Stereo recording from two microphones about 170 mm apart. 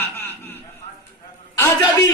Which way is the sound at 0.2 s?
10° left (ahead or behind).